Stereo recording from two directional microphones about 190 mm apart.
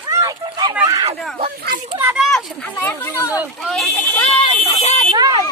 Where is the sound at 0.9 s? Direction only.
25° right (ahead or behind).